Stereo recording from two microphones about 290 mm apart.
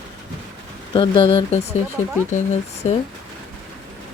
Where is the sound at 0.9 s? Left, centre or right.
Centre.